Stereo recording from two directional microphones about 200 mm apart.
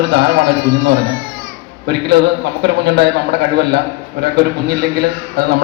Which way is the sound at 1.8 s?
55° right (ahead or behind).